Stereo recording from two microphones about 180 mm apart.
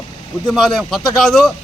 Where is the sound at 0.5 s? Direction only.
Centre (ahead or behind).